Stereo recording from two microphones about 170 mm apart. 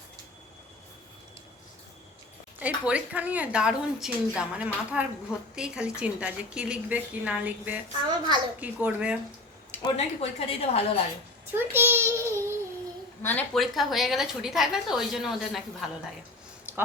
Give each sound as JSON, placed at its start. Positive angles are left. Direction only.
{"t": 2.6, "sound": "a woman's voice", "side_deg": -10}
{"t": 9.8, "sound": "a woman's voice", "side_deg": 35}
{"t": 11.5, "sound": "child singing", "side_deg": -15}
{"t": 13.2, "sound": "a woman's voice", "side_deg": 5}